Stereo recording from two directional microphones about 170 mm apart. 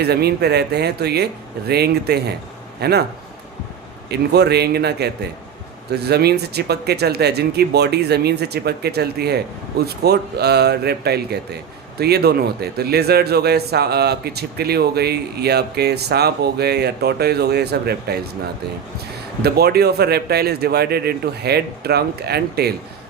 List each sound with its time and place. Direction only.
0.0 s a man's voice: 70° right (ahead or behind)
4.1 s a man's voice: 75° right (ahead or behind)
19.4 s a man's voice: 70° right (ahead or behind)